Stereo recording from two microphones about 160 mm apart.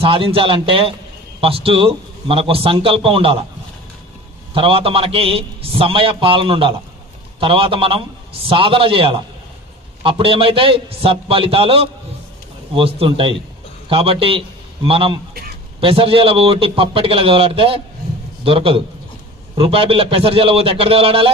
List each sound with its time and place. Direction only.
0.0 s a man's voice: 35° right (ahead or behind)
4.6 s a man's voice: 35° right (ahead or behind)